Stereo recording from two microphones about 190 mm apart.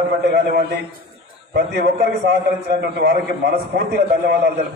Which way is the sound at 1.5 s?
60° right (ahead or behind).